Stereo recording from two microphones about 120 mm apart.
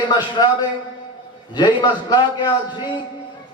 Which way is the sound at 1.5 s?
35° left (ahead or behind).